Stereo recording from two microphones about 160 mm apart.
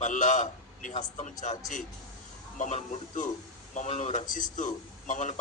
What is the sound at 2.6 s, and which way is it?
A man's voice, 45° left (ahead or behind).